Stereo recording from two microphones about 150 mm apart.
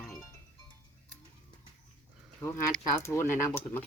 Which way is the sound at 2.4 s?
15° left (ahead or behind).